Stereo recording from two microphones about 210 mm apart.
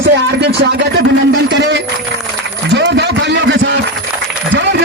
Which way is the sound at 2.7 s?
55° right (ahead or behind).